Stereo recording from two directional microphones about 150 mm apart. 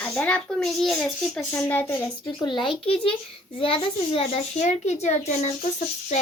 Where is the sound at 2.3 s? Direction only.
30° left (ahead or behind); by 5.7 s 55° left (ahead or behind).